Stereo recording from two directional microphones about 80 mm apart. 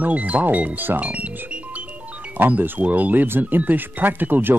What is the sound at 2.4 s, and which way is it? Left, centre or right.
Speech, right.